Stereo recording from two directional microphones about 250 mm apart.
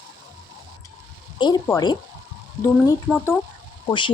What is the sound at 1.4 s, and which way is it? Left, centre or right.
A woman's voice, centre.